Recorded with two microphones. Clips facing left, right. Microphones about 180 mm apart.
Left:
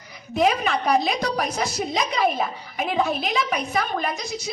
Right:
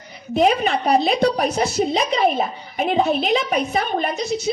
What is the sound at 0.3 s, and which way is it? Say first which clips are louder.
A woman's voice: right 4 dB; 30° right (ahead or behind).